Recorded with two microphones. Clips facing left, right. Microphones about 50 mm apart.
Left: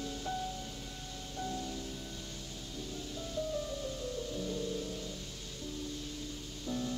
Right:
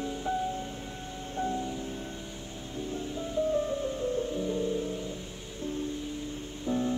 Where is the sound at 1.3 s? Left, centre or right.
Right.